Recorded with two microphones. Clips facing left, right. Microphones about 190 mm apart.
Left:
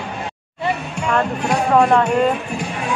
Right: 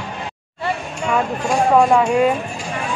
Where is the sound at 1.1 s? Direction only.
10° right (ahead or behind).